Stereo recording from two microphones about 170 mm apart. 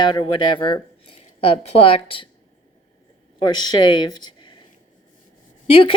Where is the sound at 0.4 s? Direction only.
30° left (ahead or behind).